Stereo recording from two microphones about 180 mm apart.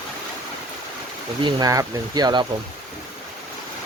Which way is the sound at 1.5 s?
20° right (ahead or behind).